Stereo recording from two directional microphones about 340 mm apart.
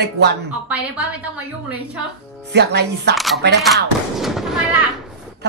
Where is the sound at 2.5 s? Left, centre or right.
Right.